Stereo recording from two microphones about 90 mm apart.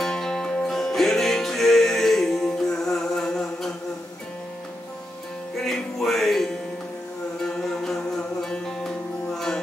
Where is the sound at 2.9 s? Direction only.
5° left (ahead or behind).